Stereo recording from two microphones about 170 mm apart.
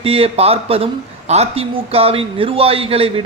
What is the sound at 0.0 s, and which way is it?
A man's voice, 35° right (ahead or behind).